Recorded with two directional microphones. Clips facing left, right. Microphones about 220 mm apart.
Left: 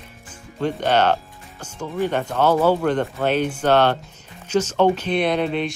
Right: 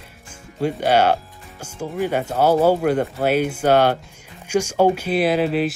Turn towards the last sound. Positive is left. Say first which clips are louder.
# right 3 dB
turn(degrees=-5)  # may be behind; listen again after turning